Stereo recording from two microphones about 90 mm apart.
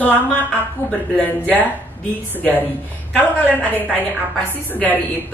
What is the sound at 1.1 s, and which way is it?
A woman's voice, 20° left (ahead or behind).